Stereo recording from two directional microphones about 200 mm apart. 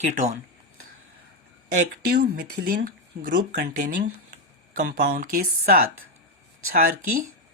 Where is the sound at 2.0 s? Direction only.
55° right (ahead or behind).